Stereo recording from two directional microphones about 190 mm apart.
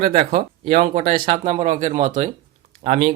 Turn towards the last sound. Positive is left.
turn(degrees=-45)  # may be behind; listen again after turning